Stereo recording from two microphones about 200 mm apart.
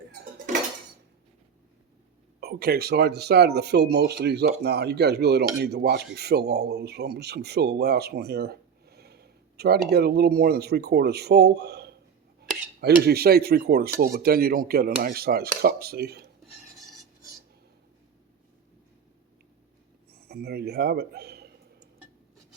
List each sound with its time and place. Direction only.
2.4 s speech: 50° right (ahead or behind)
12.4 s cutlery: 50° right (ahead or behind)
14.0 s speech: 50° right (ahead or behind)
20.1 s speech: 50° right (ahead or behind)